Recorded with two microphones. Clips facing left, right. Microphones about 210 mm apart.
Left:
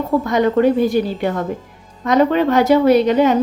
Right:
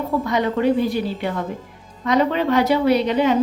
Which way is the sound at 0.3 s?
45° left (ahead or behind).